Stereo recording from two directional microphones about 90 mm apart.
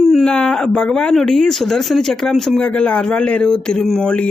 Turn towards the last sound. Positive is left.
turn(degrees=10)  # may be behind; listen again after turning